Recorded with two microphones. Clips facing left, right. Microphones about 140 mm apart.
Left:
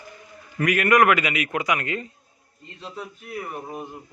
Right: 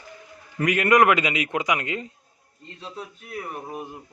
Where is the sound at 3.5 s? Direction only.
5° right (ahead or behind).